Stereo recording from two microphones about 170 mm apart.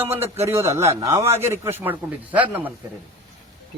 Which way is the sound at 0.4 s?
15° right (ahead or behind).